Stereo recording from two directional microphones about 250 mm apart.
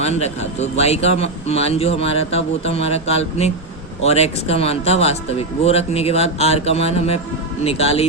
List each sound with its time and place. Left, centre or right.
0.0 s speech: left